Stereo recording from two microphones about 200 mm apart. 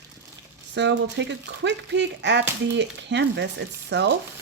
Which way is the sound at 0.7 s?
60° right (ahead or behind).